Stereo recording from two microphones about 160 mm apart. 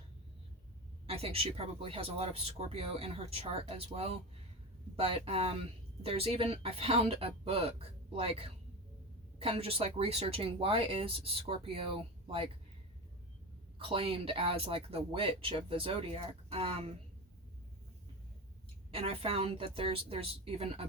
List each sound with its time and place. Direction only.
1.0 s speech: 40° right (ahead or behind)
13.7 s speech: 35° right (ahead or behind)
18.9 s speech: 35° right (ahead or behind)